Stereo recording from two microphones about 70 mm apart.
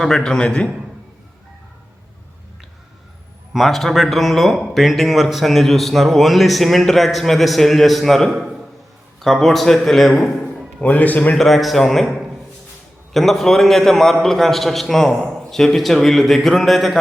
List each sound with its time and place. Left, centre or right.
0.0 s a man's voice: centre
3.5 s speech: centre
10.8 s a man's voice: left
11.3 s speech: centre